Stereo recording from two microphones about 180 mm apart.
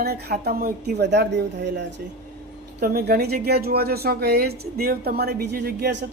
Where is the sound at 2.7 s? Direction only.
55° right (ahead or behind).